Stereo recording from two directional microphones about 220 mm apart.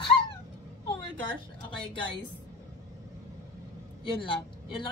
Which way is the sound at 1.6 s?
20° left (ahead or behind).